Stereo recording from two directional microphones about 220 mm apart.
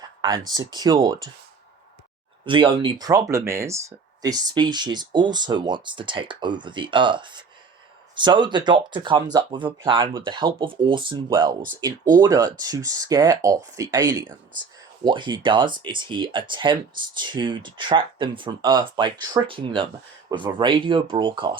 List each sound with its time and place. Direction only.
0.0 s speech: 20° right (ahead or behind)
2.4 s speech: 20° right (ahead or behind)